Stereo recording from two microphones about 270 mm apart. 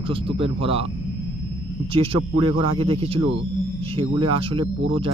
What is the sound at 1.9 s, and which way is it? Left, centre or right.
Speech, centre.